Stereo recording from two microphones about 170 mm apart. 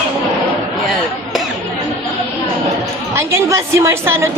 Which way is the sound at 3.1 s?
15° right (ahead or behind).